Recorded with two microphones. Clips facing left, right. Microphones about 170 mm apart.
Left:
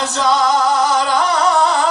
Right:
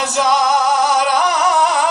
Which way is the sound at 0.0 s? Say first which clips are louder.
Even; 15° right (ahead or behind).